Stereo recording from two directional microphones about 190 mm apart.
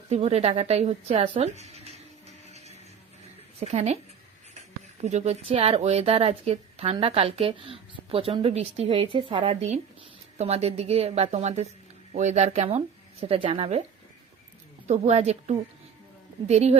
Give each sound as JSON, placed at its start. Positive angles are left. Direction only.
{"t": 0.1, "sound": "speech", "side_deg": -35}
{"t": 1.7, "sound": "music", "side_deg": -35}
{"t": 3.6, "sound": "speech", "side_deg": -35}
{"t": 14.8, "sound": "speech", "side_deg": -35}